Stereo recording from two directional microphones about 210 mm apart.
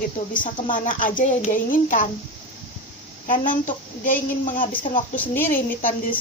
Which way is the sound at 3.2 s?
40° left (ahead or behind).